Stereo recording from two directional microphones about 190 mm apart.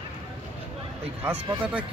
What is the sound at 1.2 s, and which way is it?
Speech, 10° right (ahead or behind).